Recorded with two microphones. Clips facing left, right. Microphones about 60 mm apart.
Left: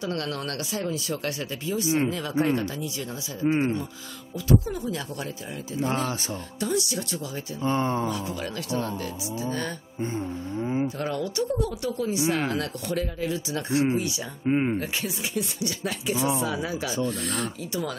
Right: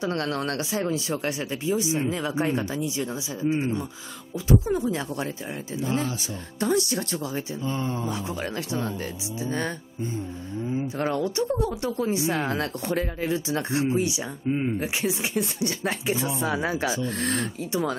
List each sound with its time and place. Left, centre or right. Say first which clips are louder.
0.0 s speech: right 3 dB; right
3.4 s speech: left 2 dB; left
4.5 s speech: right 2 dB; right
5.8 s speech: left 1 dB; left
6.6 s speech: right 4 dB; right
7.6 s speech: left 6 dB; left
8.1 s speech: right 1 dB; right
10.6 s speech: left 2 dB; left
11.0 s speech: right 3 dB; right
13.9 s speech: right 3 dB; right
14.4 s speech: left 3 dB; left
14.8 s speech: right 3 dB; centre
15.3 s speech: right 3 dB; right